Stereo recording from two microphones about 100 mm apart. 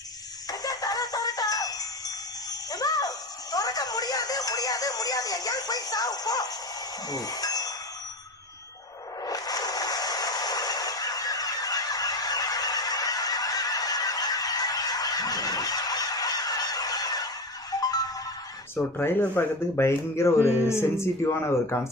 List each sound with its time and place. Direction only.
0.6 s music: 40° left (ahead or behind)
7.1 s wind chime: 40° left (ahead or behind)
9.2 s a sound: 40° left (ahead or behind)
17.7 s music: 35° left (ahead or behind)
18.9 s speech: 20° left (ahead or behind)